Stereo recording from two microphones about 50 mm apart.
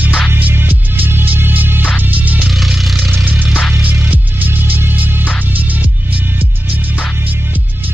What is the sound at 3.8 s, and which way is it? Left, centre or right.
Music, right.